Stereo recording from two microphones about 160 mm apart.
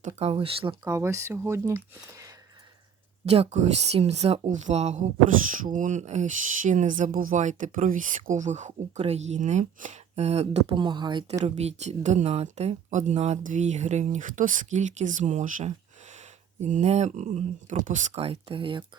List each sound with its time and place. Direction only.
0.2 s speech: 40° right (ahead or behind)
0.9 s speech: 15° right (ahead or behind)
3.2 s speech: 40° right (ahead or behind)
11.4 s speech: 40° right (ahead or behind)